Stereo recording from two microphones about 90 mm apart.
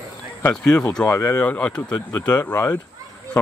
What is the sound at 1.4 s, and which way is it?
Speech, 15° left (ahead or behind).